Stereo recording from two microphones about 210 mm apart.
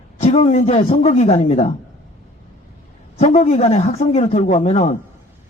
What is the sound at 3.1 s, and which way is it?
Speech, 35° left (ahead or behind).